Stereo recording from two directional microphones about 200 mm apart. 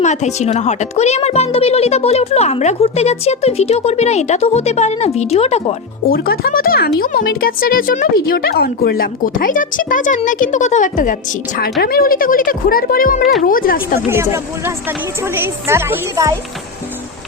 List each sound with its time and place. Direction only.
0.0 s speech: 35° left (ahead or behind)
6.1 s speech: 50° left (ahead or behind)
14.1 s speech: 10° right (ahead or behind)